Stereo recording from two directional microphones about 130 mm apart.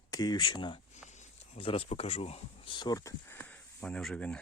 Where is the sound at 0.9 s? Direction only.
65° left (ahead or behind).